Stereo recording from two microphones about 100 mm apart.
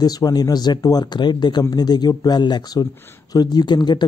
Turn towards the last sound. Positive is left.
turn(degrees=50)  # may be behind; listen again after turning